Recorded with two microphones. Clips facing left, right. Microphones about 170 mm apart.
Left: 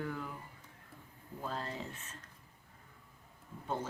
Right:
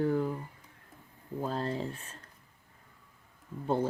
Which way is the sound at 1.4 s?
35° right (ahead or behind).